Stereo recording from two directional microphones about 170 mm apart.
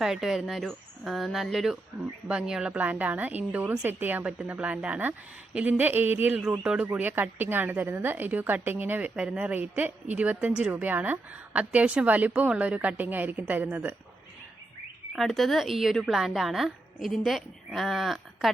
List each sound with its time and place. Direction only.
0.0 s a woman's voice: 5° right (ahead or behind)
15.1 s a woman's voice: centre (ahead or behind)